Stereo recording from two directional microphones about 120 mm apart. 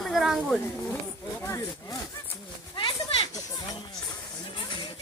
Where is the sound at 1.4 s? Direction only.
25° left (ahead or behind).